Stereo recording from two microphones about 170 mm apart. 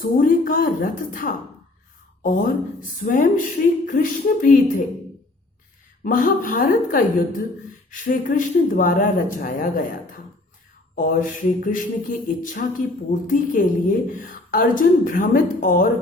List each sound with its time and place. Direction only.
0.0 s music: 55° left (ahead or behind)
6.0 s music: 55° left (ahead or behind)